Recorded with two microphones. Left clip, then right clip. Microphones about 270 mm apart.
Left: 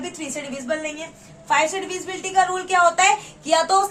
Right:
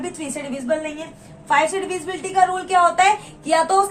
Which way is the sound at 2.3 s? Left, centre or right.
Left.